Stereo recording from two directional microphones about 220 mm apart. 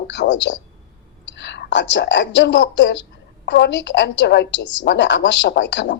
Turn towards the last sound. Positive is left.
turn(degrees=55)  # may be behind; listen again after turning